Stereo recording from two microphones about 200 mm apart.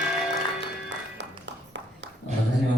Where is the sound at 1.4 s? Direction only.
65° right (ahead or behind).